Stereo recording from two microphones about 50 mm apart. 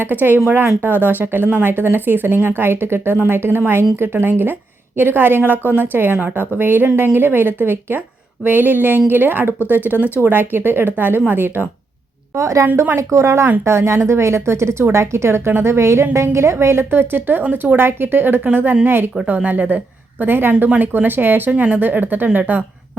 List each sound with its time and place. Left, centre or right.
0.0 s speech: right
12.3 s a woman's voice: right
12.6 s speech: right
13.0 s a woman's voice: right
16.9 s speech: right
19.5 s a woman's voice: right
21.5 s speech: right
21.8 s speech: right